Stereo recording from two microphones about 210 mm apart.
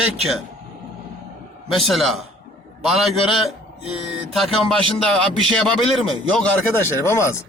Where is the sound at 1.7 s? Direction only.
Centre (ahead or behind).